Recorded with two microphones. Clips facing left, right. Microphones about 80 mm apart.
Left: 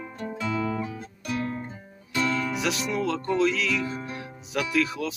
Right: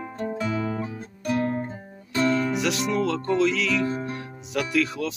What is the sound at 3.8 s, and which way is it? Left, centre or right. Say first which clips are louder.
Music: right 5 dB; right.